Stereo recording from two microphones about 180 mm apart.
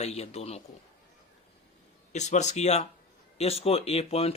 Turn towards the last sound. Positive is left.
turn(degrees=35)  # may be behind; listen again after turning